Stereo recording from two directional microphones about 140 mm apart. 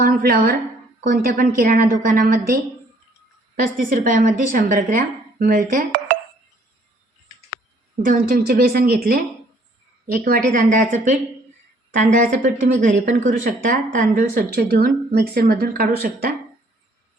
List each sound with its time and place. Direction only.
0.0 s speech: 90° right
1.0 s a woman's voice: 75° right (ahead or behind)
8.0 s a woman's voice: 85° right